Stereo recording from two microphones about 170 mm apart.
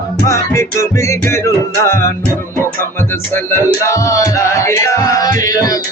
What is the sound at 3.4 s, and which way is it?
Music, 15° left (ahead or behind).